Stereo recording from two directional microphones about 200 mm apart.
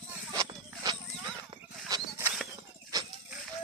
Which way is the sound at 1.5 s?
20° right (ahead or behind).